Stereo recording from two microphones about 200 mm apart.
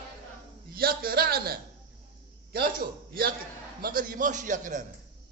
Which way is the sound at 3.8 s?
45° right (ahead or behind).